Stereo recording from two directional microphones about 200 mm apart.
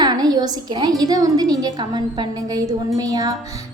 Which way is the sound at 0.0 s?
20° right (ahead or behind).